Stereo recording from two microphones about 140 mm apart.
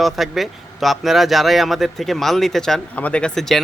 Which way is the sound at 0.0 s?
Centre (ahead or behind).